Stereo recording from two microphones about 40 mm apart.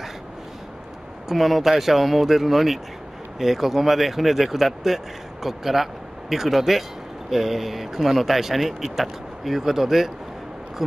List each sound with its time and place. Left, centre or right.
1.3 s speech: centre